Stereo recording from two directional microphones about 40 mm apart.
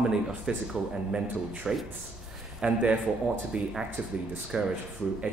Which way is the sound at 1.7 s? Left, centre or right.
Centre.